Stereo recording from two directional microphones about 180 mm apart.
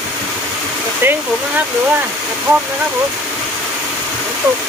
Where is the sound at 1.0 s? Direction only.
15° right (ahead or behind).